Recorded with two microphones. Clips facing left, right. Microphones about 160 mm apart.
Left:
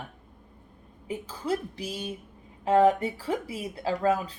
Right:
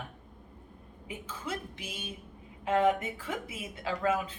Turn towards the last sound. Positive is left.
turn(degrees=35)  # may be behind; listen again after turning